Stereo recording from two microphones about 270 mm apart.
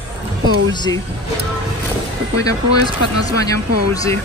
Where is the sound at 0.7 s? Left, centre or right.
Centre.